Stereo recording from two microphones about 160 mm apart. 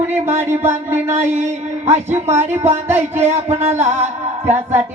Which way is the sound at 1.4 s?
40° right (ahead or behind).